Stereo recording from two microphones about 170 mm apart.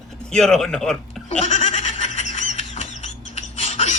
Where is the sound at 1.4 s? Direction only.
40° left (ahead or behind).